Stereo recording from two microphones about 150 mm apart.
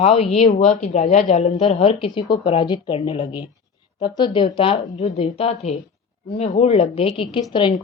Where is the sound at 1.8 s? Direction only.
35° left (ahead or behind).